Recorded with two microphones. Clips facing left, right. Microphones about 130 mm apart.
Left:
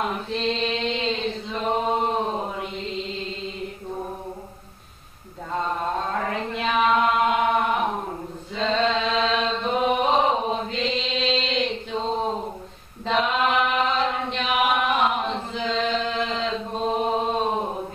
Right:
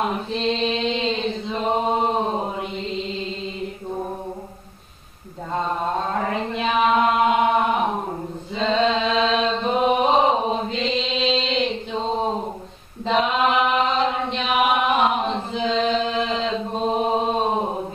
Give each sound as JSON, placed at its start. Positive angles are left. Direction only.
{"t": 0.3, "sound": "mantra", "side_deg": -5}
{"t": 1.2, "sound": "chant", "side_deg": -20}
{"t": 5.5, "sound": "chant", "side_deg": -15}
{"t": 10.8, "sound": "chant", "side_deg": 0}
{"t": 11.3, "sound": "a sound", "side_deg": -15}
{"t": 13.3, "sound": "chant", "side_deg": -15}
{"t": 16.4, "sound": "mantra", "side_deg": -15}